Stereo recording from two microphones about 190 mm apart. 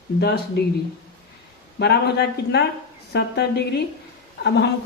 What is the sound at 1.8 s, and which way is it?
A woman's voice, 60° left (ahead or behind).